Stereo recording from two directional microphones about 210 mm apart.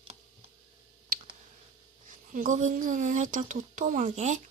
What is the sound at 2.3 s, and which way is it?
Speech, 40° right (ahead or behind).